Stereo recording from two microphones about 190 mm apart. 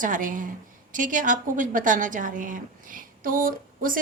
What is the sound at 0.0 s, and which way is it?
A woman's voice, 45° right (ahead or behind).